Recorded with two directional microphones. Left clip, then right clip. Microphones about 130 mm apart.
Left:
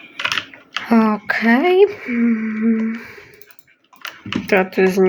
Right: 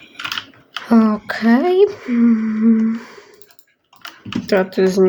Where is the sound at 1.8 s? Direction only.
30° right (ahead or behind).